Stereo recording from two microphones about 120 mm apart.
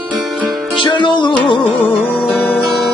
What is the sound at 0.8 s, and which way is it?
Music, 40° left (ahead or behind).